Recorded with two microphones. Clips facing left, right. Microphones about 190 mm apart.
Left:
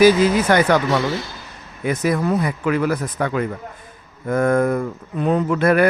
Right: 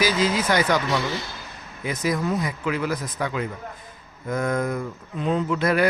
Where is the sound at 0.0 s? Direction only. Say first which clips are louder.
Left 9 dB; 55° left (ahead or behind).